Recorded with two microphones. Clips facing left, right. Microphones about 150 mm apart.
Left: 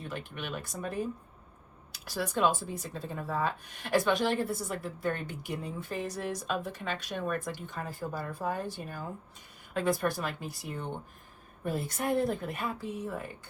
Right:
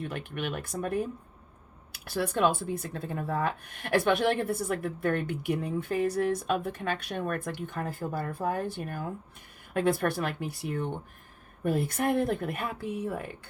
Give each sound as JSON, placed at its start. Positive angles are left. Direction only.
{"t": 0.0, "sound": "speech", "side_deg": -60}